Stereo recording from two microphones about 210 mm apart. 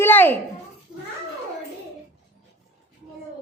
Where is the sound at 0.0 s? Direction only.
10° left (ahead or behind).